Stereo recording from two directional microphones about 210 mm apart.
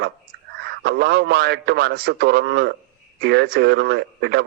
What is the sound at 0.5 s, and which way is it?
Speech, 50° right (ahead or behind).